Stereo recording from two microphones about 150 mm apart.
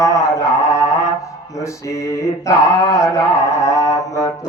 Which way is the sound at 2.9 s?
20° left (ahead or behind).